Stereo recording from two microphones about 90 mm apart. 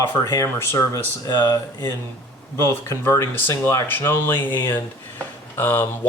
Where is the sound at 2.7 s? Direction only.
30° left (ahead or behind).